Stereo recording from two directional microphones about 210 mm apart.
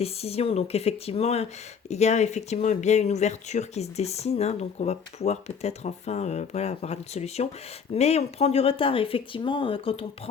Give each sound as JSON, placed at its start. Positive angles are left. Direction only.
{"t": 0.0, "sound": "speech", "side_deg": 30}